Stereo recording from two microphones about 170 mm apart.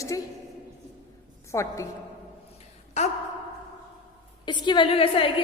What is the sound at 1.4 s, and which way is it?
Speech, 15° left (ahead or behind).